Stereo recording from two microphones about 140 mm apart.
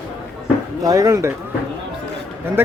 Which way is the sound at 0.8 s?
25° right (ahead or behind).